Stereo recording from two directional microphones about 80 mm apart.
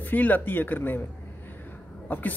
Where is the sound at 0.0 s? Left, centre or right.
Left.